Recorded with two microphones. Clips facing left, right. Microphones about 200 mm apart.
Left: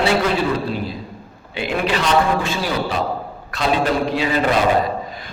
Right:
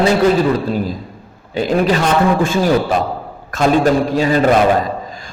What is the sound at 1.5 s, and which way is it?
A man's voice, 40° right (ahead or behind).